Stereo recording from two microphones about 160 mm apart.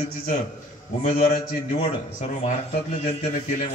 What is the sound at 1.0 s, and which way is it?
Speech, 65° left (ahead or behind).